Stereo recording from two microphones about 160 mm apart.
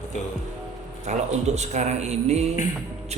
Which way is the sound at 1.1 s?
45° right (ahead or behind).